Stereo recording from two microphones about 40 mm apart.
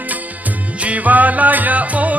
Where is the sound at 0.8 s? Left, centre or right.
Right.